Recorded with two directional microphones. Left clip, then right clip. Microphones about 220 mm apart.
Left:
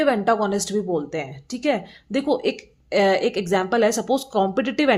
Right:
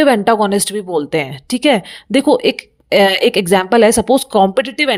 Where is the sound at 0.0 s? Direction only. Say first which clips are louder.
Right 8 dB; 40° right (ahead or behind).